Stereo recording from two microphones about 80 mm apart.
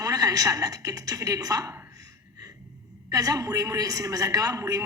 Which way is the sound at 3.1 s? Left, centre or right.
Right.